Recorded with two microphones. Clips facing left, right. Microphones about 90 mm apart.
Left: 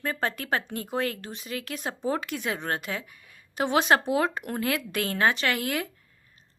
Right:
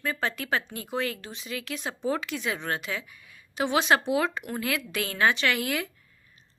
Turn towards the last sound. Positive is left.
turn(degrees=45)  # may be behind; listen again after turning